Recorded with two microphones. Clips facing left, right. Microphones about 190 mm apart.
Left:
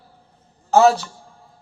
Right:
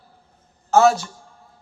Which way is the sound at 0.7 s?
35° left (ahead or behind).